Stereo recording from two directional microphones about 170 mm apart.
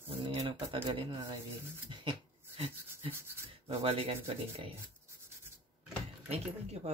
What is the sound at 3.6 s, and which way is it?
Speech, 35° right (ahead or behind).